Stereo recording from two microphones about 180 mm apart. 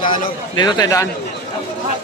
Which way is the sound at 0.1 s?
25° left (ahead or behind).